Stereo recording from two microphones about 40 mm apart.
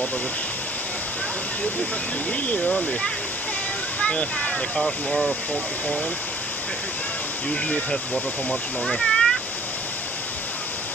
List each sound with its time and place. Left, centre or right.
2.4 s speech: left
2.7 s speech: left
4.7 s speech: centre
7.9 s speech: left
8.8 s a sound: centre